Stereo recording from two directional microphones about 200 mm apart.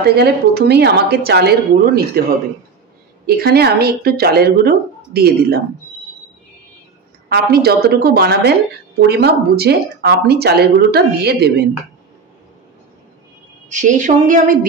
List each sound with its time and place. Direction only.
0.0 s speech: 55° right (ahead or behind)
7.2 s speech: 50° right (ahead or behind)
13.7 s a woman's voice: 40° right (ahead or behind)